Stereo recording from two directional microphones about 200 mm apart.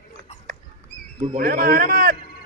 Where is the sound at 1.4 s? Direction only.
45° right (ahead or behind).